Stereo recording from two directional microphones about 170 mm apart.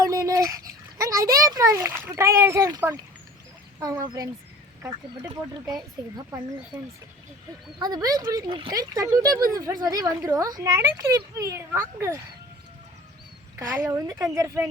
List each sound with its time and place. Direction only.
0.0 s dog: 20° right (ahead or behind)
1.1 s a sound: 20° right (ahead or behind)
2.0 s speech: 15° right (ahead or behind)
5.7 s speech: 25° right (ahead or behind)
7.8 s speech: 25° right (ahead or behind)
13.6 s speech: 15° right (ahead or behind)